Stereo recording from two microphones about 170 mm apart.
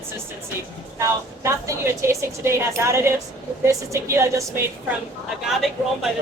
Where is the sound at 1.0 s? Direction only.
15° right (ahead or behind).